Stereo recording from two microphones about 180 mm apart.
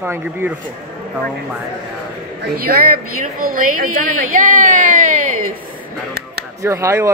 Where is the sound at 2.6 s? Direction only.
55° right (ahead or behind).